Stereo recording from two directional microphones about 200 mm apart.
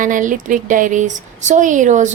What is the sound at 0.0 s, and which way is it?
Speech, 40° right (ahead or behind).